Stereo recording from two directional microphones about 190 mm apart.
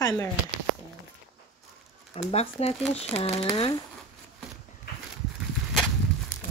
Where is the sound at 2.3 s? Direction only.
30° left (ahead or behind).